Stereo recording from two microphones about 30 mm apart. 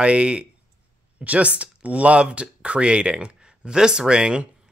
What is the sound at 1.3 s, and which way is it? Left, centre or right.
Speech, right.